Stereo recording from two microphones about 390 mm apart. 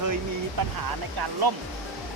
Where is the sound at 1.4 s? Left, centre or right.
Right.